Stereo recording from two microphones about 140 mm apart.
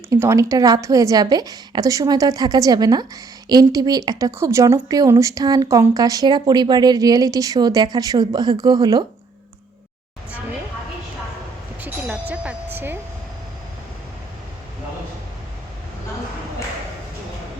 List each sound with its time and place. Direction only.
0.1 s speech: 20° right (ahead or behind)
11.8 s music: 10° right (ahead or behind)